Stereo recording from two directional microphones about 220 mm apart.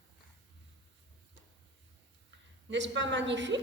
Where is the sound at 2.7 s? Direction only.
55° right (ahead or behind).